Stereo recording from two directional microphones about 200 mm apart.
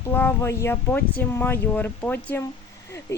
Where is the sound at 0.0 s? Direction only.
10° left (ahead or behind).